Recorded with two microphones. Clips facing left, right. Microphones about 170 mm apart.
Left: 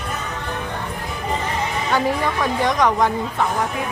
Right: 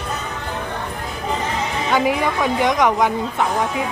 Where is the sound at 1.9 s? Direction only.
10° right (ahead or behind).